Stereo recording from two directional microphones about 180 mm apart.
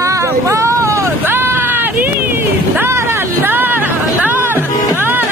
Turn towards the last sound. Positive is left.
turn(degrees=-10)  # may be behind; listen again after turning